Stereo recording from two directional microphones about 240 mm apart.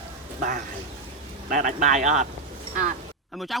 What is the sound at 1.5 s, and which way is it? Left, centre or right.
Speech, right.